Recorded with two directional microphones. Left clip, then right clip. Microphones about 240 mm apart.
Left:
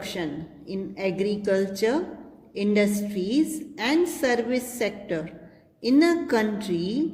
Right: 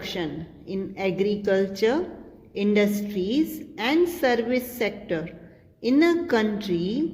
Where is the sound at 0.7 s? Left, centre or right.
Centre.